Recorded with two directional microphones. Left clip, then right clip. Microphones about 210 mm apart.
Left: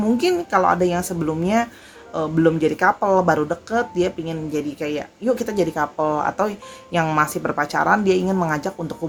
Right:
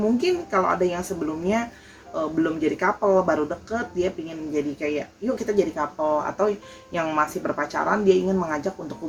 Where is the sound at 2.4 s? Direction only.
45° left (ahead or behind).